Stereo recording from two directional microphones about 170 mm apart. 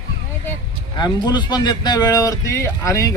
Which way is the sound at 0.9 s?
25° left (ahead or behind).